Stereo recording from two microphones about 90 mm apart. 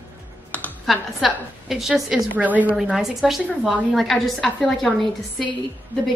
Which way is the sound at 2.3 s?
20° right (ahead or behind).